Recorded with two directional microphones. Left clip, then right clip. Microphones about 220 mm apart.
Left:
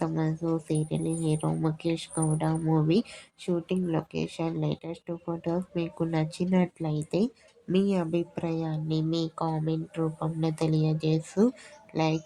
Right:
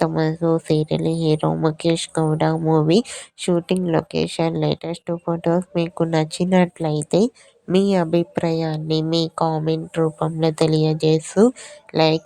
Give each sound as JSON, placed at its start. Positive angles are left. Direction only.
{"t": 0.0, "sound": "speech", "side_deg": -35}